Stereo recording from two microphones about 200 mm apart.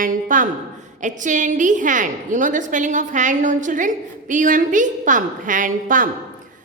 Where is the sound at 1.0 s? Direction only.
40° right (ahead or behind).